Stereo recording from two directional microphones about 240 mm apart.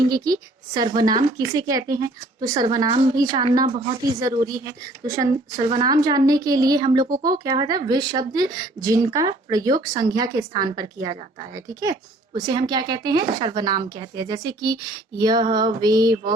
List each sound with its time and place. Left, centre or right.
0.0 s a woman's voice: centre